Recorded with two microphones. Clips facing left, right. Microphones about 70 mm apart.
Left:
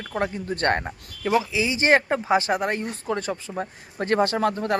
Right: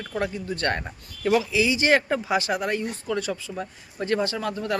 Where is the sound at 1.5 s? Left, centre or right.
Left.